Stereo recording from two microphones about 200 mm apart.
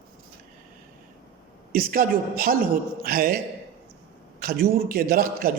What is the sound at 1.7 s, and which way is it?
A man's voice, 45° right (ahead or behind).